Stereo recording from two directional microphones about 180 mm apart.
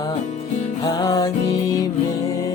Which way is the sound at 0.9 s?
20° left (ahead or behind).